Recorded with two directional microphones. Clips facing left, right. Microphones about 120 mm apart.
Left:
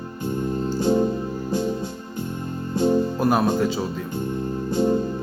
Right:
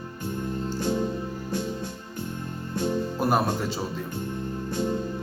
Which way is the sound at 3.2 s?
5° right (ahead or behind).